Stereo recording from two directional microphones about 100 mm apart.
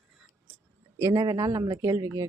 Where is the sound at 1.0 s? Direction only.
35° right (ahead or behind).